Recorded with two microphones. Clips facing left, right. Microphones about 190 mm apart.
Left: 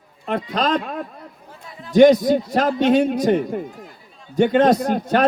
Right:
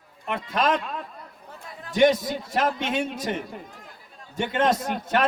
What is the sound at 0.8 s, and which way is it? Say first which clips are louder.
A man's voice: left 6 dB; 55° left (ahead or behind).